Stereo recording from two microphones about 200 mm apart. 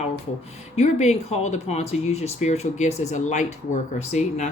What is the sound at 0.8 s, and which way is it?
Speech, 35° left (ahead or behind).